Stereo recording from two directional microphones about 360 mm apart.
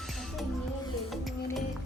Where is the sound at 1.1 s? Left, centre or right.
Centre.